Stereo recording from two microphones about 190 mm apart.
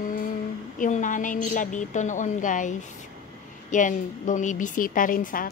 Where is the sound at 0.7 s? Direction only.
40° left (ahead or behind).